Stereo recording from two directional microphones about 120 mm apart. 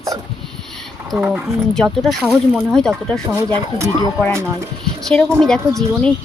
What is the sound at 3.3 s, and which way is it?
Speech, 25° right (ahead or behind).